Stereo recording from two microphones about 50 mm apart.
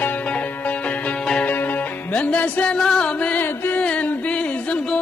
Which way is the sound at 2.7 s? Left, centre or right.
Centre.